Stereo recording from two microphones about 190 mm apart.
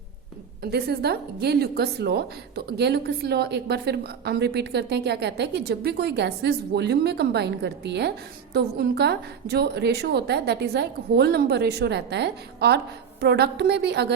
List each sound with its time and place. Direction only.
0.6 s a woman's voice: 55° right (ahead or behind)